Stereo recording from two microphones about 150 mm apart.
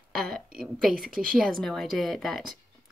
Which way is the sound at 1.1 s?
70° right (ahead or behind).